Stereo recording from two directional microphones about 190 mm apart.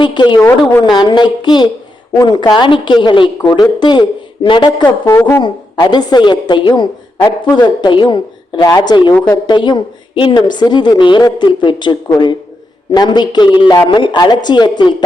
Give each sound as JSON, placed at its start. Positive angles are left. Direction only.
{"t": 0.0, "sound": "a woman's voice", "side_deg": 25}
{"t": 0.4, "sound": "a woman's voice", "side_deg": 10}
{"t": 0.9, "sound": "a woman's voice", "side_deg": 25}
{"t": 9.1, "sound": "a woman's voice", "side_deg": 10}
{"t": 9.5, "sound": "a woman's voice", "side_deg": 25}